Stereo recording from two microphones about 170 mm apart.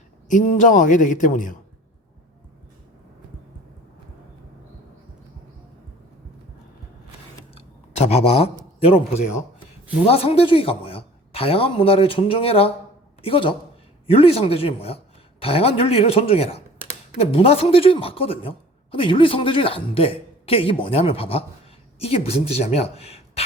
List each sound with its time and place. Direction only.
0.3 s a man's voice: 45° left (ahead or behind)
7.5 s a sound: 40° left (ahead or behind)
10.1 s a man's voice: 35° left (ahead or behind)